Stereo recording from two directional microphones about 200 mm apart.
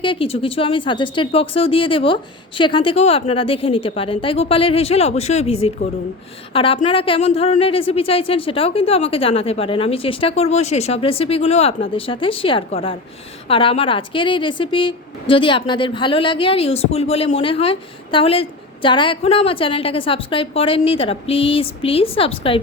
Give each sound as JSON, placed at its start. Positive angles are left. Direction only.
{"t": 0.0, "sound": "speech", "side_deg": 25}